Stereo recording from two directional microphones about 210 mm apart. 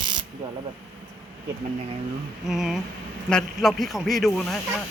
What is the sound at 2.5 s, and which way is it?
Speech, centre (ahead or behind).